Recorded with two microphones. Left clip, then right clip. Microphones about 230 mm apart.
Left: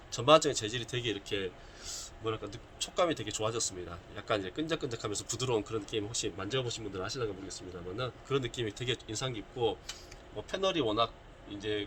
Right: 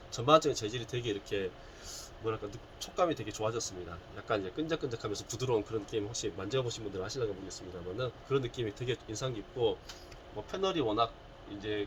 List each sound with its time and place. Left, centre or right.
0.1 s speech: centre